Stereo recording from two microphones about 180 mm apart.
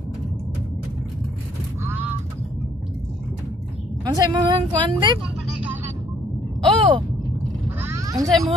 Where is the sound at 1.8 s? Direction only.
10° right (ahead or behind).